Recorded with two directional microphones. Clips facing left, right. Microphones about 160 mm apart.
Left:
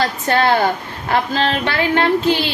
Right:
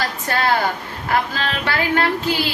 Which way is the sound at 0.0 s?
25° left (ahead or behind).